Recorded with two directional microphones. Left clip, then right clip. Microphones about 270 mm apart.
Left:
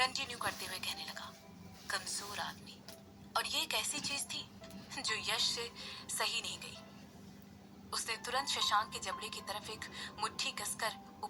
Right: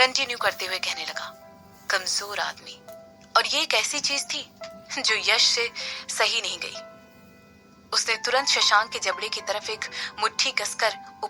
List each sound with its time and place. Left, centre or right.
0.0 s speech: right
7.9 s speech: right